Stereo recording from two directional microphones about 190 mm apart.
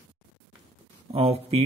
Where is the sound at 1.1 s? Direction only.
30° right (ahead or behind).